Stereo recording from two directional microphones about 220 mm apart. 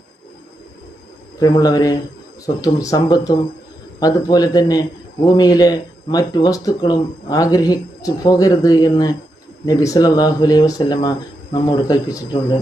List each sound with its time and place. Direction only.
1.4 s a man's voice: 15° left (ahead or behind)